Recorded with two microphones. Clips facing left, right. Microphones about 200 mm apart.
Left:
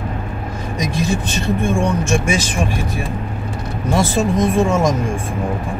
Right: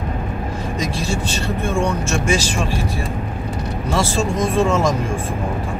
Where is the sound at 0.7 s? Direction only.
15° left (ahead or behind).